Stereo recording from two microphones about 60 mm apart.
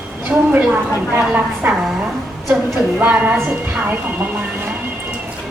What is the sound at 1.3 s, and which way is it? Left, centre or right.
Speech, right.